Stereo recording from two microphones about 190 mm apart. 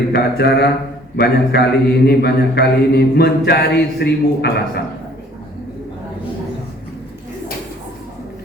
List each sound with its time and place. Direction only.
0.1 s mantra: 60° left (ahead or behind)